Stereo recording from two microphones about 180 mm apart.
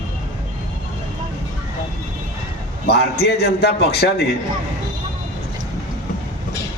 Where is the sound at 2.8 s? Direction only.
65° left (ahead or behind).